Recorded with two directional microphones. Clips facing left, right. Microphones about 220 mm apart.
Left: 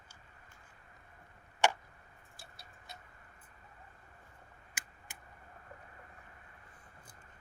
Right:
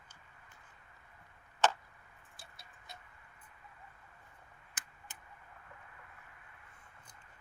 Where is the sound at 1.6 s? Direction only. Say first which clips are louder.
Even; 10° left (ahead or behind).